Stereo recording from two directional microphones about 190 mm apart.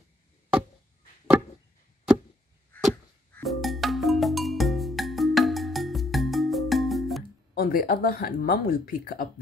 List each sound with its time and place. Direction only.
2.7 s arrow: 10° left (ahead or behind)
3.4 s music: centre (ahead or behind)
7.5 s speech: 50° left (ahead or behind)